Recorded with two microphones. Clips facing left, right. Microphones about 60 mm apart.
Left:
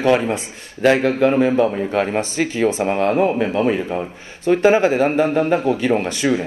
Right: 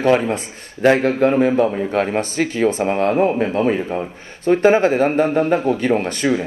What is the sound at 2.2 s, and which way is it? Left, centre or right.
Speech, right.